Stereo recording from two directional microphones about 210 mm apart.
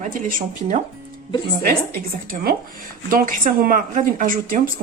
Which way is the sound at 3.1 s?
40° right (ahead or behind).